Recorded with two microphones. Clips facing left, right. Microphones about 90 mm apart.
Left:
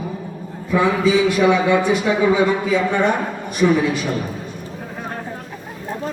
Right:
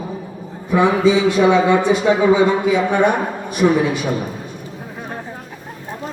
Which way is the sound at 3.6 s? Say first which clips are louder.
Right 1 dB; 30° right (ahead or behind).